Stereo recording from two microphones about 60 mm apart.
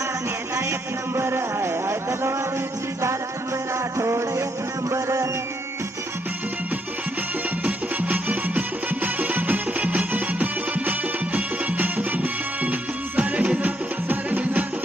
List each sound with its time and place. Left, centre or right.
0.5 s music: right
3.9 s music: right
7.6 s music: right